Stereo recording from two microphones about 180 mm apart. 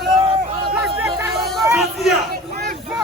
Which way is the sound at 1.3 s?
Centre (ahead or behind).